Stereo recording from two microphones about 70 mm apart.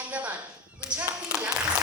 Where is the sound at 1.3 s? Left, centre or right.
Centre.